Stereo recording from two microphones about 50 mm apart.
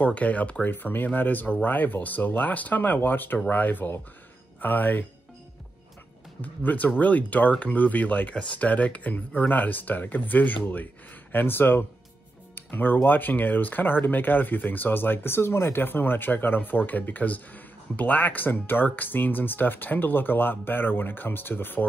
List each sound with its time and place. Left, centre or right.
0.0 s speech: left
0.7 s speech: left
6.4 s speech: left